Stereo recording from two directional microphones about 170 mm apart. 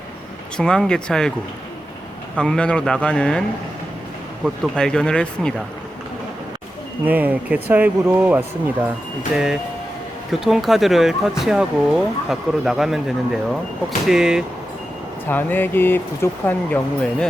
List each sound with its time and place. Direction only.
0.5 s speech: 5° left (ahead or behind)
2.3 s speech: 5° left (ahead or behind)
4.4 s speech: centre (ahead or behind)
7.0 s speech: 10° right (ahead or behind)
15.3 s speech: 10° left (ahead or behind)